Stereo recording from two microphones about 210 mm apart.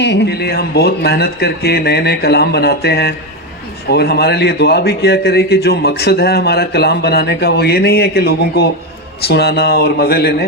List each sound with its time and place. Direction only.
0.0 s a man's voice: 55° left (ahead or behind)